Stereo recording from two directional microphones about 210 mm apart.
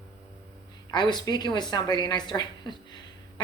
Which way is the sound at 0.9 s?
20° left (ahead or behind).